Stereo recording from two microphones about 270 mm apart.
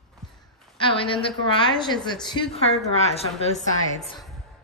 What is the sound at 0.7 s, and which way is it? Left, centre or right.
A woman's voice, centre.